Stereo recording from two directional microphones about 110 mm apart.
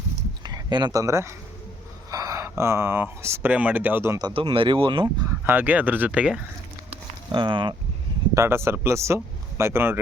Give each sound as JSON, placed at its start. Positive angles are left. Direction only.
{"t": 0.4, "sound": "speech", "side_deg": -40}
{"t": 4.4, "sound": "speech", "side_deg": -55}
{"t": 5.5, "sound": "speech", "side_deg": -15}
{"t": 7.3, "sound": "speech", "side_deg": -45}
{"t": 8.4, "sound": "a man's voice", "side_deg": -25}